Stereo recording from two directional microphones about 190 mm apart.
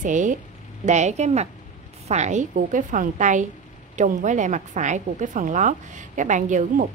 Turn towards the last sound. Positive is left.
turn(degrees=-40)  # may be behind; listen again after turning